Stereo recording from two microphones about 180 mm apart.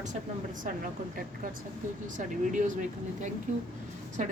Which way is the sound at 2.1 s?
45° right (ahead or behind).